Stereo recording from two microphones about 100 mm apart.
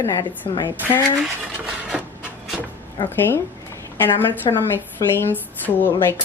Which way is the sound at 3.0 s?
20° left (ahead or behind).